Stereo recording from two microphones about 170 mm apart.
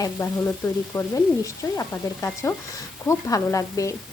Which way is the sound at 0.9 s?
15° left (ahead or behind).